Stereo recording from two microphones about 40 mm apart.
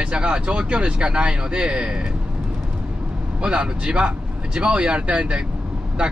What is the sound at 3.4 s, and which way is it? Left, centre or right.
Speech, right.